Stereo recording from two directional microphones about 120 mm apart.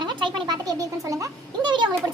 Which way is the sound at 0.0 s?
40° right (ahead or behind).